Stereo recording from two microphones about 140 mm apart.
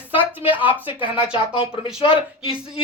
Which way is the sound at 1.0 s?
40° left (ahead or behind).